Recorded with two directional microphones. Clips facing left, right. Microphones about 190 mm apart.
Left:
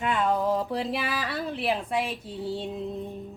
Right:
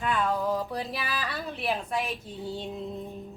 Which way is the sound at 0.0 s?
20° left (ahead or behind).